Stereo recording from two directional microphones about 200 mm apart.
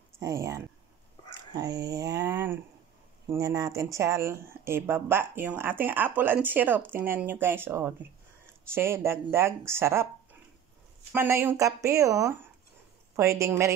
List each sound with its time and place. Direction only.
0.2 s speech: 15° right (ahead or behind)
11.1 s speech: 15° right (ahead or behind)